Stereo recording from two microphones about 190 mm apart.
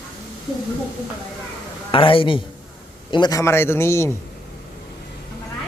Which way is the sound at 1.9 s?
30° left (ahead or behind).